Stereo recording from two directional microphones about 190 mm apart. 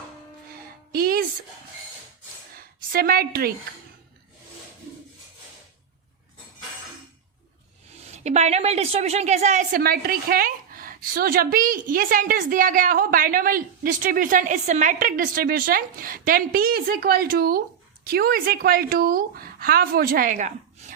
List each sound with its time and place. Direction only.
0.9 s music: 50° right (ahead or behind)
2.6 s a sound: 50° right (ahead or behind)
8.0 s a woman's voice: 35° right (ahead or behind)